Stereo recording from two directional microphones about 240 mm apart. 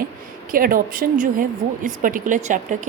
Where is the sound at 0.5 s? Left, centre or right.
Right.